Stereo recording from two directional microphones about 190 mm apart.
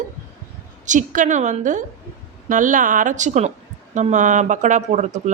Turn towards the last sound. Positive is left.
turn(degrees=-40)  # may be behind; listen again after turning